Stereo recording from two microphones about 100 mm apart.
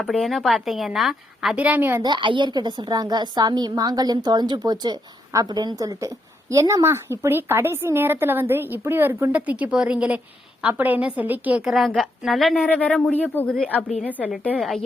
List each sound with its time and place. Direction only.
0.0 s a woman's voice: centre (ahead or behind)
1.5 s a woman's voice: 15° right (ahead or behind)
2.0 s a woman's voice: 50° right (ahead or behind); by 11.7 s 15° right (ahead or behind)
11.9 s a woman's voice: centre (ahead or behind)
12.6 s speech: 15° left (ahead or behind)
14.2 s a woman's voice: centre (ahead or behind)